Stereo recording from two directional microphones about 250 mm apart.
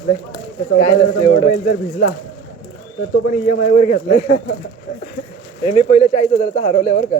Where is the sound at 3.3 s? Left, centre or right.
Left.